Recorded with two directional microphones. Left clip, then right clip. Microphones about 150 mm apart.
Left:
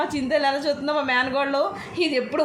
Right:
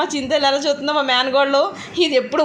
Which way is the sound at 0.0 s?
15° right (ahead or behind).